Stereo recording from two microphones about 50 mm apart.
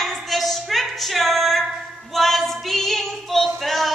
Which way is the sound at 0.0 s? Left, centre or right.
Centre.